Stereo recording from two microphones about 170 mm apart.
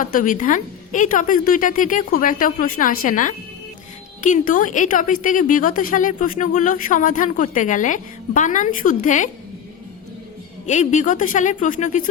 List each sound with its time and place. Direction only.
0.0 s a woman's voice: 50° left (ahead or behind)
10.7 s a woman's voice: 45° left (ahead or behind)